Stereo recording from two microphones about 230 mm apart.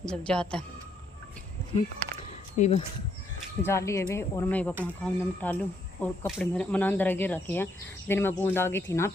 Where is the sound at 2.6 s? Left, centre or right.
Left.